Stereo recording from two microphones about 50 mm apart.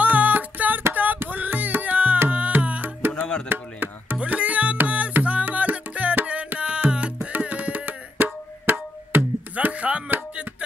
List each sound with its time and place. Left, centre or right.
0.0 s music: right
3.4 s chop: right
4.2 s music: right
9.7 s music: right